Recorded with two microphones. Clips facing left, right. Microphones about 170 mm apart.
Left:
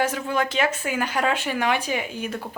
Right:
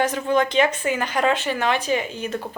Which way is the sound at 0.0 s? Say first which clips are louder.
Right 4 dB; 5° left (ahead or behind).